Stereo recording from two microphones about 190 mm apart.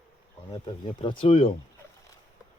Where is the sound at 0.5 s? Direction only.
25° left (ahead or behind).